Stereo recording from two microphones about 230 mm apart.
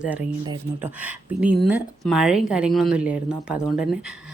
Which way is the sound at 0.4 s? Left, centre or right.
Centre.